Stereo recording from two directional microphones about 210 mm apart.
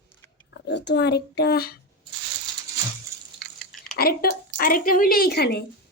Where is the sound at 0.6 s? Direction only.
55° left (ahead or behind).